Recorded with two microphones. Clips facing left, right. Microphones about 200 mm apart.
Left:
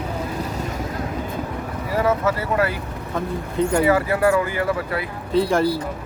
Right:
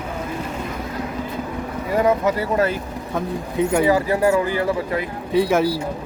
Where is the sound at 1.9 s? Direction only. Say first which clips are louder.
Right 2 dB; 15° right (ahead or behind).